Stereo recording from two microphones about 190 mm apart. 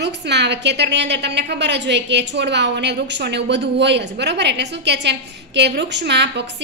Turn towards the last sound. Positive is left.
turn(degrees=-65)  # may be behind; listen again after turning